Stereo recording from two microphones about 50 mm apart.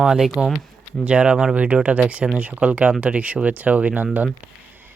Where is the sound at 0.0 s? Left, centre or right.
Centre.